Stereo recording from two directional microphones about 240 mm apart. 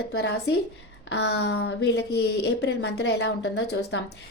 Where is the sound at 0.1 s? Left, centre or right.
Left.